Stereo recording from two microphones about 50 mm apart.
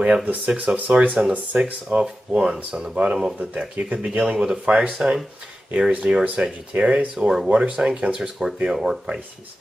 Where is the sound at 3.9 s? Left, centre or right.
Right.